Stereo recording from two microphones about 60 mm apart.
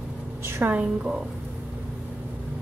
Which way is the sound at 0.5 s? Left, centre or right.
Right.